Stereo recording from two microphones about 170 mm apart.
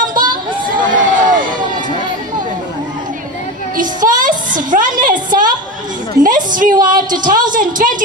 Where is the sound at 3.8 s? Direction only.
50° right (ahead or behind).